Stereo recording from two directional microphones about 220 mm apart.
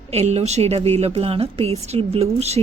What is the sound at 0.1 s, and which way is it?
A woman's voice, 30° right (ahead or behind).